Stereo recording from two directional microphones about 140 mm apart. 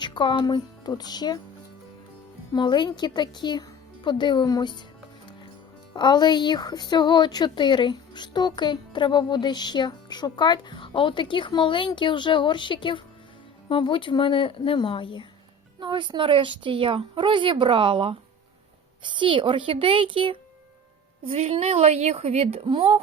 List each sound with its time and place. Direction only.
0.0 s speech: 35° left (ahead or behind)
2.5 s speech: 35° left (ahead or behind)
5.9 s speech: 30° left (ahead or behind)
15.8 s a woman's voice: 35° right (ahead or behind)